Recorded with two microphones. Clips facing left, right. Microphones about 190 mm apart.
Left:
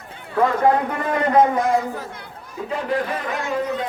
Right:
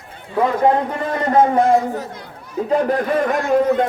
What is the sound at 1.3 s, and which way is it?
Speech, 30° right (ahead or behind).